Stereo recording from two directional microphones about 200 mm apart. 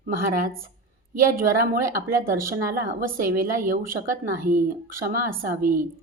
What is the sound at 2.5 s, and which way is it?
Speech, 45° right (ahead or behind).